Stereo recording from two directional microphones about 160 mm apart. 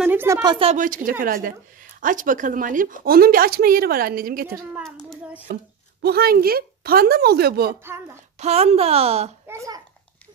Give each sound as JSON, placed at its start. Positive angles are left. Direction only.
{"t": 0.0, "sound": "a sound", "side_deg": -15}
{"t": 0.4, "sound": "speech", "side_deg": -25}
{"t": 0.7, "sound": "a woman's voice", "side_deg": -60}
{"t": 2.0, "sound": "a woman's voice", "side_deg": -55}
{"t": 6.0, "sound": "speech", "side_deg": -70}
{"t": 7.8, "sound": "a woman's voice", "side_deg": -15}
{"t": 8.4, "sound": "a woman's voice", "side_deg": -40}
{"t": 9.5, "sound": "a child's voice", "side_deg": -20}